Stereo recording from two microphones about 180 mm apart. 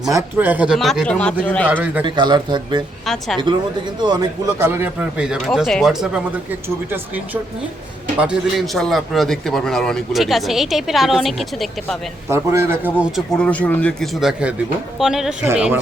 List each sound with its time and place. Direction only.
0.1 s a man's voice: 15° right (ahead or behind); by 1.6 s 5° left (ahead or behind)
1.6 s speech: 10° right (ahead or behind)
2.0 s speech: 25° right (ahead or behind)
3.1 s a man's voice: centre (ahead or behind)
4.6 s a man's voice: 10° right (ahead or behind)
8.2 s a man's voice: 5° right (ahead or behind)
12.3 s a man's voice: 15° right (ahead or behind)